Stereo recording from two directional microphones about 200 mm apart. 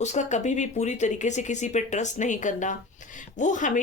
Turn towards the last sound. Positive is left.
turn(degrees=40)  # may be behind; listen again after turning